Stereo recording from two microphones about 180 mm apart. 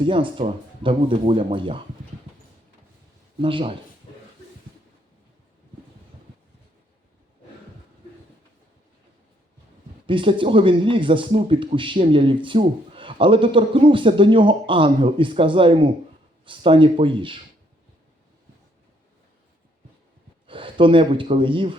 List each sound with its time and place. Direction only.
0.0 s speech: 30° right (ahead or behind)
3.4 s speech: 30° right (ahead or behind)
10.1 s speech: 30° right (ahead or behind)
20.5 s speech: 30° right (ahead or behind)